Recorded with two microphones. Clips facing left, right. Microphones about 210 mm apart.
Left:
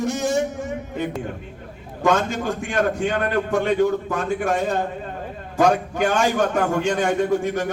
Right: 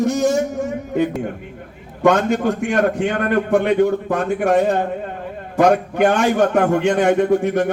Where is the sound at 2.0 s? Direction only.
60° right (ahead or behind).